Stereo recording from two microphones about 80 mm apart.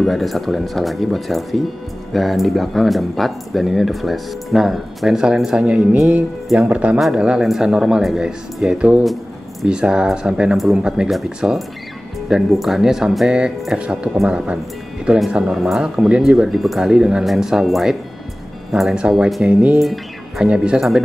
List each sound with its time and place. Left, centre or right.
0.0 s speech: centre
7.0 s speech: centre
9.0 s a sound: centre
9.7 s speech: centre